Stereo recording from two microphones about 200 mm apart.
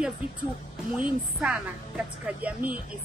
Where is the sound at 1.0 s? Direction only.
5° right (ahead or behind).